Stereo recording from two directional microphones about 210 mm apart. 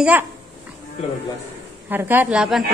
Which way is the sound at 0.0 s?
10° right (ahead or behind).